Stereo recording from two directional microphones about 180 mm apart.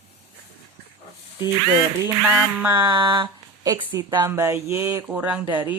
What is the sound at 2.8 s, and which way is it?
Speech, 25° right (ahead or behind).